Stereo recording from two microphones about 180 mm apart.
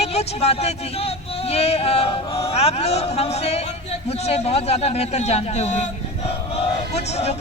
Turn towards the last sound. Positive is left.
turn(degrees=35)  # may be behind; listen again after turning